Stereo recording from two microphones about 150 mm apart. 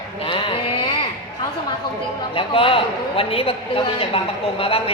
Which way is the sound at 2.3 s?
35° left (ahead or behind).